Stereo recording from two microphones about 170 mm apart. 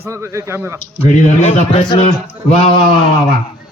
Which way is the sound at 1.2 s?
40° left (ahead or behind).